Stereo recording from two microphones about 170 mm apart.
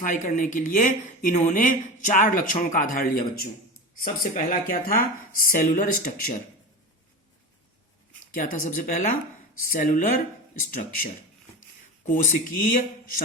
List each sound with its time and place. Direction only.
0.0 s speech: 50° left (ahead or behind)
8.4 s speech: 50° left (ahead or behind)